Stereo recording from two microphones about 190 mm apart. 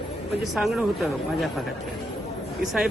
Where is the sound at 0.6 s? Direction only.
Centre (ahead or behind).